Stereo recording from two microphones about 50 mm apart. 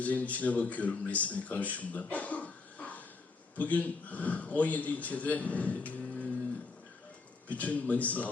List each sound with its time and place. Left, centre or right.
0.0 s a man's voice: left
7.4 s a man's voice: left